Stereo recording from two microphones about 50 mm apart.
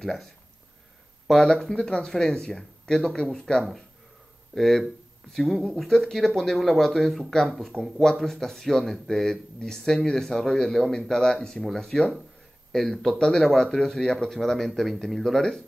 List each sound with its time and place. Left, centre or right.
0.0 s speech: centre
1.4 s speech: centre
4.6 s speech: centre